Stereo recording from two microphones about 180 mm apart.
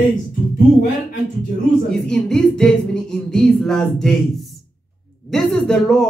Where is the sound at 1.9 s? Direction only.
5° left (ahead or behind).